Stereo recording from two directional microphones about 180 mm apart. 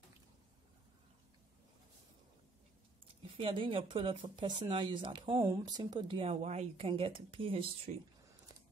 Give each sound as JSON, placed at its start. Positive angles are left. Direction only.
{"t": 3.3, "sound": "speech", "side_deg": -30}